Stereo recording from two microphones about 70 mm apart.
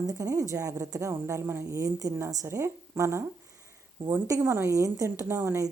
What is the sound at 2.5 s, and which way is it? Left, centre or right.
Speech, right.